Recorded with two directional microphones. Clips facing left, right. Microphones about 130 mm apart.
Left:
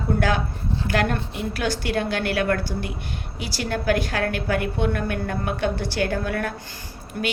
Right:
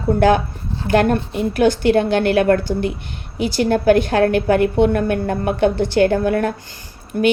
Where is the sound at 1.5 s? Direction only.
20° right (ahead or behind).